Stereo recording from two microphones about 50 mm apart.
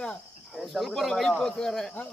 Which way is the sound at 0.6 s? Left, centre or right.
Centre.